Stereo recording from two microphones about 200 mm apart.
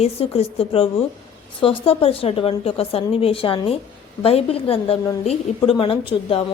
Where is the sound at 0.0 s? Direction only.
30° left (ahead or behind).